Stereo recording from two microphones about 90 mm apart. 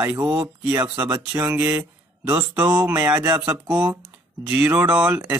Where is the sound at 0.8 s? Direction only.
50° right (ahead or behind).